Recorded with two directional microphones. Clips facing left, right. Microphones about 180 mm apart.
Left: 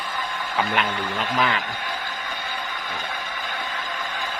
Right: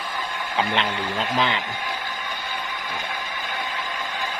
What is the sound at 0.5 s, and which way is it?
Speech, 20° right (ahead or behind).